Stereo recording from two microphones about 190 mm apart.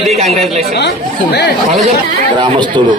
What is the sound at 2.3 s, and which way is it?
Speech, 25° right (ahead or behind).